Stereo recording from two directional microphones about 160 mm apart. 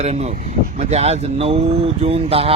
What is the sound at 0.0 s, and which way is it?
Speech, 40° right (ahead or behind).